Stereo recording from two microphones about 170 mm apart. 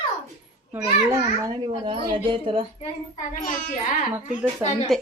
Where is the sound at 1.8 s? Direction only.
30° right (ahead or behind).